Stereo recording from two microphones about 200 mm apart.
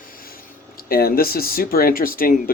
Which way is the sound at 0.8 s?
50° left (ahead or behind).